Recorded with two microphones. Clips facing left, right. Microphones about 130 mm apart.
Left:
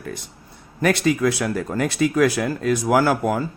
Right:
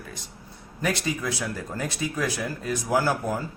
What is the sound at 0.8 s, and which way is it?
Speech, 70° left (ahead or behind).